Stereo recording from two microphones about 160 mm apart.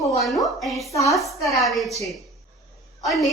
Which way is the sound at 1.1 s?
Centre (ahead or behind).